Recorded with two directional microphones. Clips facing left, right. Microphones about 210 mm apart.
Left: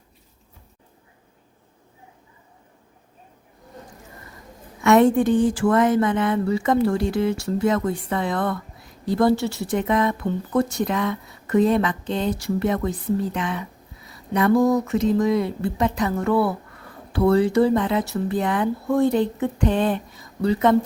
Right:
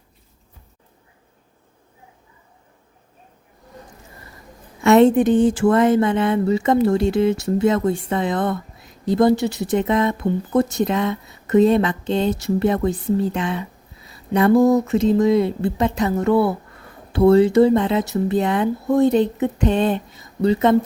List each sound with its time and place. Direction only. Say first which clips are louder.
4.8 s speech: right 3 dB; 25° right (ahead or behind)